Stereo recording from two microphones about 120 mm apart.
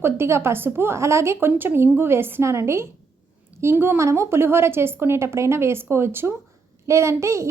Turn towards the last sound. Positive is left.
turn(degrees=-25)  # may be behind; listen again after turning